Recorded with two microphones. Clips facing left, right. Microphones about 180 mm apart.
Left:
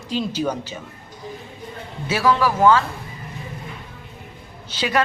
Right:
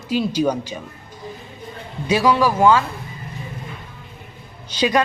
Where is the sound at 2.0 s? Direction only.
15° right (ahead or behind).